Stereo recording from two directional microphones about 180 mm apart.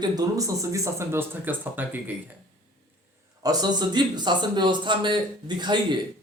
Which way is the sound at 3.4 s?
20° right (ahead or behind).